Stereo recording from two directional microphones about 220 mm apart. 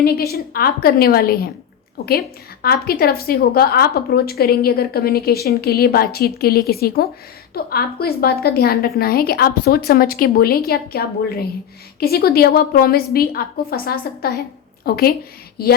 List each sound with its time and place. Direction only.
0.0 s a woman's voice: 45° left (ahead or behind)